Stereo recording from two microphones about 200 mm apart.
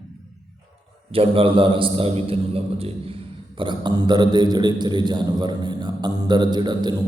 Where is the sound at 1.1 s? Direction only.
25° right (ahead or behind).